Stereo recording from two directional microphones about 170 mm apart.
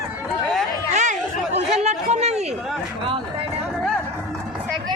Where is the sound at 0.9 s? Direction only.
45° right (ahead or behind).